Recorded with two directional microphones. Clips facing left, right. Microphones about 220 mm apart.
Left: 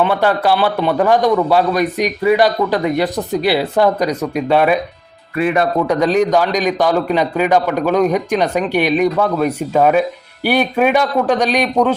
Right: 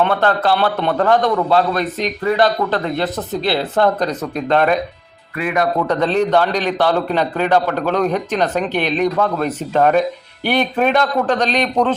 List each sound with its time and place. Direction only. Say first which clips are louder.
0.0 s a man's voice: left 1 dB; 10° left (ahead or behind)
5.4 s a man's voice: left 4 dB; 30° left (ahead or behind)
5.9 s a man's voice: left 2 dB; 10° left (ahead or behind)